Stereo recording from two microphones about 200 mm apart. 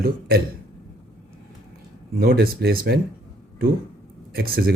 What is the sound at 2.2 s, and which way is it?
Speech, 50° right (ahead or behind).